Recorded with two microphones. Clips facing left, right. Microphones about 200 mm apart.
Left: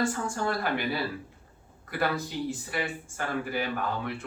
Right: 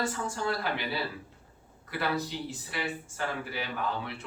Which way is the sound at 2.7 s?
50° left (ahead or behind).